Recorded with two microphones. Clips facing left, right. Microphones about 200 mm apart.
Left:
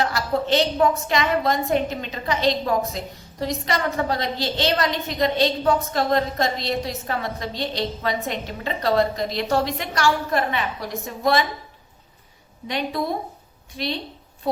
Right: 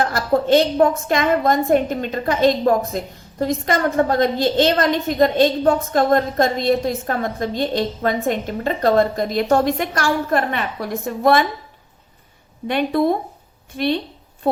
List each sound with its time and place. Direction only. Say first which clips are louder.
0.0 s a woman's voice: right 5 dB; 50° right (ahead or behind)
12.6 s a woman's voice: right 8 dB; 55° right (ahead or behind)